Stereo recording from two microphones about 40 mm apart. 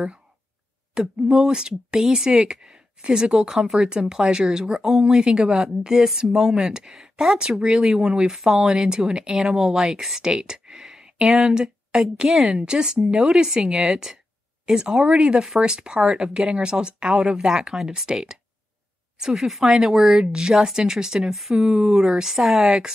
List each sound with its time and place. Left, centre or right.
0.9 s speech: centre
9.4 s speech: centre
11.2 s speech: centre
11.5 s speech: centre
15.1 s speech: right
15.9 s speech: centre
16.3 s speech: centre
20.2 s speech: centre